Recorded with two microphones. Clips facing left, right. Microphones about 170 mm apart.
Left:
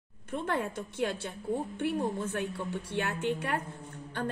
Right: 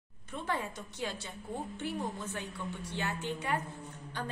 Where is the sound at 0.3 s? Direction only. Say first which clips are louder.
Left 4 dB; 55° left (ahead or behind).